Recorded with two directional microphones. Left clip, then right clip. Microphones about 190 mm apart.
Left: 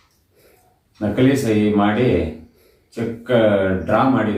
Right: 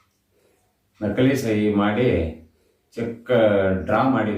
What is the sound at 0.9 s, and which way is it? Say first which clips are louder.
A man's voice: left 3 dB; centre (ahead or behind).